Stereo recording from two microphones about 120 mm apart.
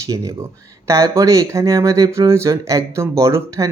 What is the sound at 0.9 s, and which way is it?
Speech, 25° right (ahead or behind).